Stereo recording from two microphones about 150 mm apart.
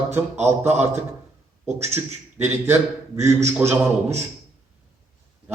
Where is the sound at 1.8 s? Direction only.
15° right (ahead or behind).